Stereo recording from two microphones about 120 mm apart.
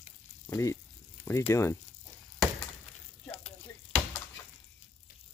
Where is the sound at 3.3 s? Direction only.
65° left (ahead or behind).